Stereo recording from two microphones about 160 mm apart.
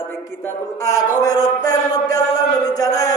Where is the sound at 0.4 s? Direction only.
20° left (ahead or behind).